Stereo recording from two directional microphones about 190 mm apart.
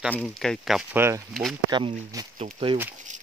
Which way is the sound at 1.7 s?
25° right (ahead or behind).